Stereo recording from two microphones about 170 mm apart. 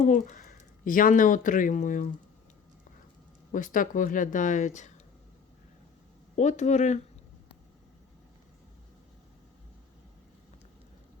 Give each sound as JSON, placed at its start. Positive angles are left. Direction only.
{"t": 0.0, "sound": "speech", "side_deg": 50}
{"t": 3.5, "sound": "speech", "side_deg": 50}
{"t": 6.3, "sound": "speech", "side_deg": 45}